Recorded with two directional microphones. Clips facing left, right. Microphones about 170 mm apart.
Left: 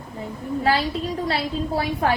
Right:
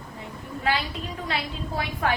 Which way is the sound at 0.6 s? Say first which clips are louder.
Left 5 dB; 35° left (ahead or behind).